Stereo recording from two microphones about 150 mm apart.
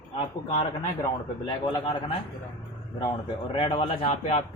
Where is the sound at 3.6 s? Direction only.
35° left (ahead or behind).